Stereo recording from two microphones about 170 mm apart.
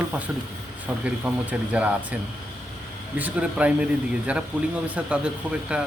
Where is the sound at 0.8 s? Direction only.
10° right (ahead or behind).